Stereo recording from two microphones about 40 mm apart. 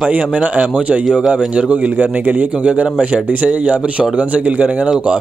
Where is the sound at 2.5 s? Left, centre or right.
Right.